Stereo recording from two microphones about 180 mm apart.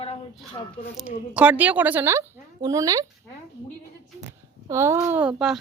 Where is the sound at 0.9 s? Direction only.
5° right (ahead or behind).